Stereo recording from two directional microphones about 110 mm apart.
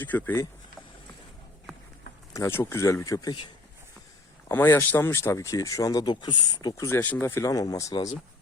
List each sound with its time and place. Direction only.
0.0 s speech: 15° left (ahead or behind)
2.3 s speech: 25° left (ahead or behind); by 3.5 s 40° left (ahead or behind)
4.4 s speech: 20° left (ahead or behind); by 6.8 s 40° left (ahead or behind)
6.8 s speech: 20° left (ahead or behind)
7.5 s speech: 35° left (ahead or behind)